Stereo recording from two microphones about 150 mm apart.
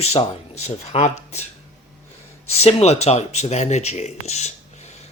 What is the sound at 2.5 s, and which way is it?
Speech, 45° left (ahead or behind).